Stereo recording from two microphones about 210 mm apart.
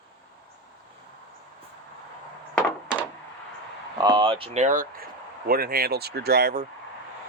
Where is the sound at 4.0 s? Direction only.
20° right (ahead or behind); by 6.6 s 45° right (ahead or behind).